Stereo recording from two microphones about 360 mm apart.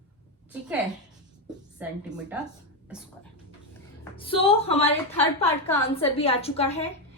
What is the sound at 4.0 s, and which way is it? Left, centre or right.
A woman's voice, centre.